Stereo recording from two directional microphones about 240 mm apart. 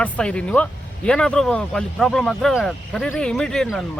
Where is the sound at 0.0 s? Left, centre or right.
Centre.